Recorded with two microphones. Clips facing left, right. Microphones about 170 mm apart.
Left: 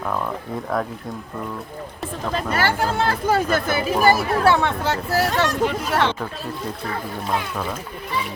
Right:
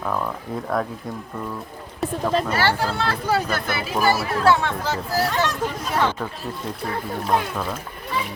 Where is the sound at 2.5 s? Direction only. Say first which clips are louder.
Left 1 dB; 45° left (ahead or behind).